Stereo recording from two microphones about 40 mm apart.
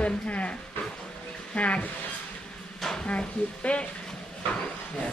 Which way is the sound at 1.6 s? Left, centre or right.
Left.